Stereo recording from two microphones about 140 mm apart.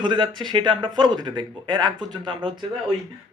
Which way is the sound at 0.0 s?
35° right (ahead or behind).